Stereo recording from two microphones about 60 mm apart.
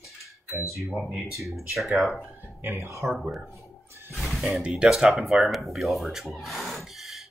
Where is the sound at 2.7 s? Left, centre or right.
Right.